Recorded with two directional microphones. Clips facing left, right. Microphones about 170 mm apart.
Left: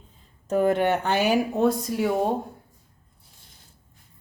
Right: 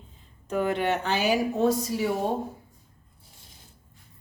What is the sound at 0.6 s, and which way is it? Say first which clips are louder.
Speech: left 4 dB; 45° left (ahead or behind).